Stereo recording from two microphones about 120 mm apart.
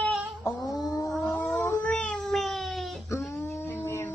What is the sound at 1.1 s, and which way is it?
Cat, centre (ahead or behind).